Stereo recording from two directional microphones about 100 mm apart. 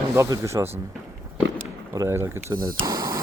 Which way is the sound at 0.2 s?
30° right (ahead or behind).